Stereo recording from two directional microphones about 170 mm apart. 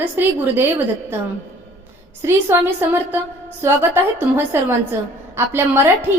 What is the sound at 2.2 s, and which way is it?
A woman's voice, 15° right (ahead or behind).